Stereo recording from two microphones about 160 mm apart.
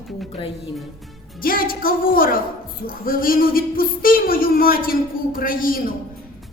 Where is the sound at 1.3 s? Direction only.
65° left (ahead or behind).